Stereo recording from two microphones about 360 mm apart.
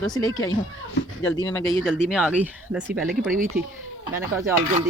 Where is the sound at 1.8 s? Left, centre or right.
Centre.